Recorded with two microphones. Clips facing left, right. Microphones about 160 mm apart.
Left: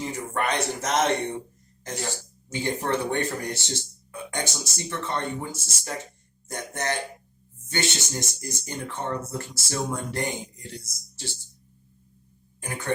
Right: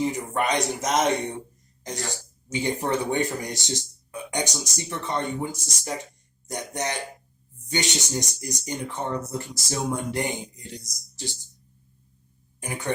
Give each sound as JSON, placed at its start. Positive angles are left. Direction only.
{"t": 0.0, "sound": "speech", "side_deg": -15}
{"t": 12.6, "sound": "speech", "side_deg": -15}